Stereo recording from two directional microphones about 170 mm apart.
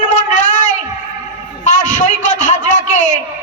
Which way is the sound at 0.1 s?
45° left (ahead or behind).